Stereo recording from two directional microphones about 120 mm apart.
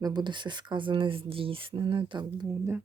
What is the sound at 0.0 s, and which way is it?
Speech, 35° right (ahead or behind).